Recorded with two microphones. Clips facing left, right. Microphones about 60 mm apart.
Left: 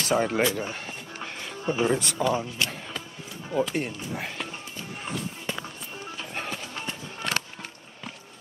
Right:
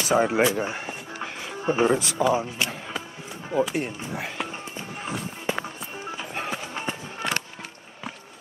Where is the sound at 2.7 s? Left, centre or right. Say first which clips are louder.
Right 3 dB; centre.